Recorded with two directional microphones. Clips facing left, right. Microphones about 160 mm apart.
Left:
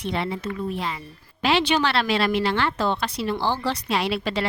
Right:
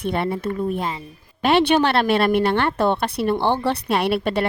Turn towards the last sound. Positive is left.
turn(degrees=-60)  # may be behind; listen again after turning